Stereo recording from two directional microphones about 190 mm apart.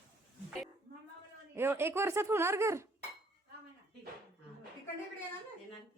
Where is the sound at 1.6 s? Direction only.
10° right (ahead or behind).